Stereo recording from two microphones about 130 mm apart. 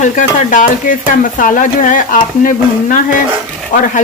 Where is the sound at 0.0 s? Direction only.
75° left (ahead or behind).